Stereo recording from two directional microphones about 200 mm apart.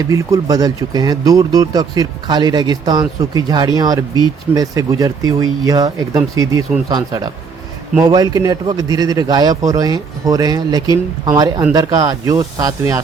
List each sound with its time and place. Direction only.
0.0 s speech: 15° right (ahead or behind)